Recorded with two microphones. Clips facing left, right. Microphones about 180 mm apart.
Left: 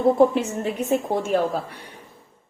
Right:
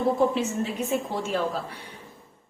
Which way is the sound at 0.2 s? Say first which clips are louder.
Left 5 dB; 55° left (ahead or behind).